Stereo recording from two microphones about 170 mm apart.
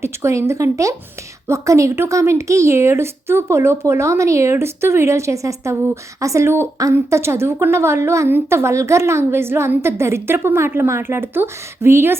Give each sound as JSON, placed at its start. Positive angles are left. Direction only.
{"t": 0.0, "sound": "a woman's voice", "side_deg": -15}